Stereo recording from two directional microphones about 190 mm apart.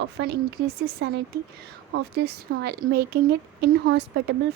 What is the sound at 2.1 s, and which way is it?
Speech, 55° right (ahead or behind).